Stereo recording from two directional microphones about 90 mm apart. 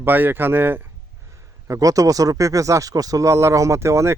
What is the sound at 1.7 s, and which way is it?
Speech, 40° right (ahead or behind).